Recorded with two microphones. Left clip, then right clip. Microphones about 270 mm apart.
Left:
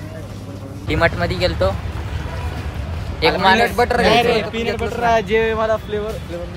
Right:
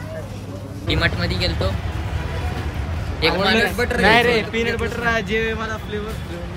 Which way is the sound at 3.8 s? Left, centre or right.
Centre.